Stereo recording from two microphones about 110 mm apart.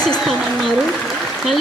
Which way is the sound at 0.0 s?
5° left (ahead or behind).